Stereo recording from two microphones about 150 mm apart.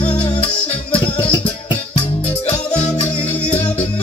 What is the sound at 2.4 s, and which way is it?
Music, 50° left (ahead or behind).